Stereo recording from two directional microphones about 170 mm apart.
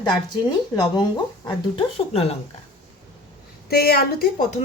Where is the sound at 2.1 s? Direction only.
35° left (ahead or behind).